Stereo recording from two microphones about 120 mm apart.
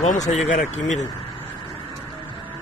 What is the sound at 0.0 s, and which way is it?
Speech, 80° left.